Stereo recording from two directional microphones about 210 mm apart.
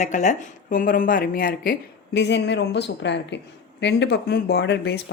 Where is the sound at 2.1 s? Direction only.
55° left (ahead or behind).